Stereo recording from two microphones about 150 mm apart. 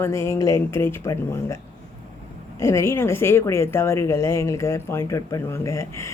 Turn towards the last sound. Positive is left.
turn(degrees=20)  # may be behind; listen again after turning